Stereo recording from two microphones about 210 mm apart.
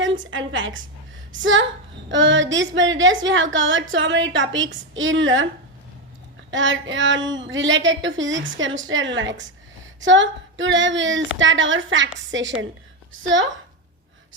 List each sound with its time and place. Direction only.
0.3 s a woman's voice: 65° right (ahead or behind)
6.5 s a woman's voice: 65° right (ahead or behind)